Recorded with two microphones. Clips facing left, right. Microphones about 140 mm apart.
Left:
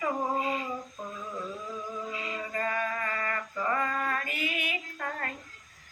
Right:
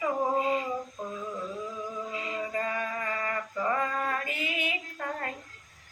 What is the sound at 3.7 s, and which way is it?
Female singing, 20° right (ahead or behind).